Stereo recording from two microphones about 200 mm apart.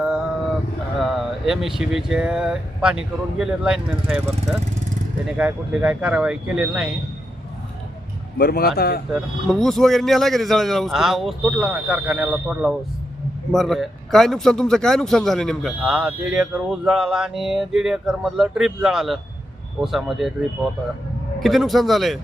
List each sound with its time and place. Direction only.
0.9 s a man's voice: centre (ahead or behind)
8.4 s speech: 50° left (ahead or behind)
9.5 s a man's voice: centre (ahead or behind)
21.4 s a man's voice: centre (ahead or behind)